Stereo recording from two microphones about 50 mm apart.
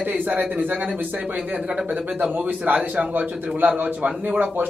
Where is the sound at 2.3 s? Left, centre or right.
Right.